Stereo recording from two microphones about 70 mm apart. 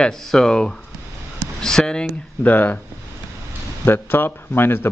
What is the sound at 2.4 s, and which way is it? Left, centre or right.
Speech, left.